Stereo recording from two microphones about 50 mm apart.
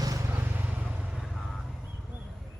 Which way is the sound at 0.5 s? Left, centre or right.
Right.